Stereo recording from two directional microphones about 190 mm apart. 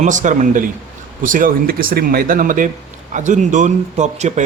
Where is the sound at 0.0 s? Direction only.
40° right (ahead or behind).